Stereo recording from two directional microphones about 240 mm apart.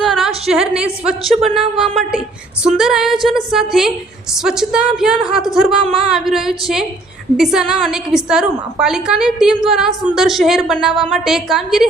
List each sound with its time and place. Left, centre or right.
0.0 s a woman's voice: centre
5.8 s speech: right
6.1 s a woman's voice: centre